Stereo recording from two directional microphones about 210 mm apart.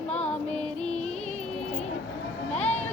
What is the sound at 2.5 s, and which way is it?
Music, 30° left (ahead or behind).